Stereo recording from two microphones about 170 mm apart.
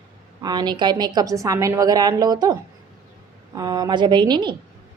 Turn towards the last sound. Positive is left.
turn(degrees=-25)  # may be behind; listen again after turning